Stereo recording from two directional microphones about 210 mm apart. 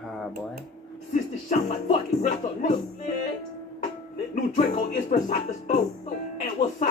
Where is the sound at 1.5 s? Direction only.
35° left (ahead or behind).